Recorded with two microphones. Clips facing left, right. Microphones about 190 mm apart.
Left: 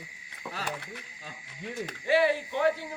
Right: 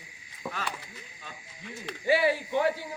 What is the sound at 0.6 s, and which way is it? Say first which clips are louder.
Speech: left 1 dB; 35° left (ahead or behind).